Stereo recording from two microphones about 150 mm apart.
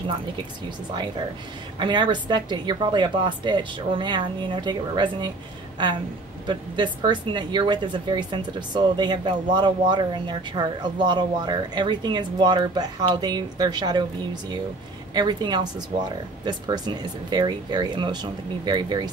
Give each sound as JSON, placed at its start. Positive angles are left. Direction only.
{"t": 1.8, "sound": "a woman's voice", "side_deg": -30}
{"t": 6.4, "sound": "speech", "side_deg": -30}
{"t": 15.1, "sound": "speech", "side_deg": -30}